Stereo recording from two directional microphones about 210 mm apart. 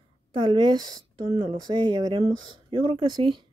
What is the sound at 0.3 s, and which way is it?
Speech, 20° right (ahead or behind).